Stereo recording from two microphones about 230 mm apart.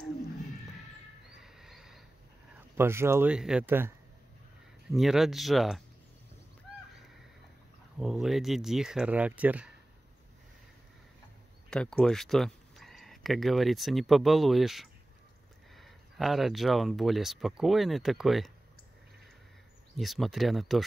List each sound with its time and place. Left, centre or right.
1.4 s a sound: centre
2.7 s speech: centre
4.9 s speech: centre
8.0 s speech: centre
11.7 s speech: centre
20.0 s speech: centre